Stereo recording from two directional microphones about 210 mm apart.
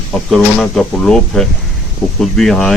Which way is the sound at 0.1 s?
Centre (ahead or behind).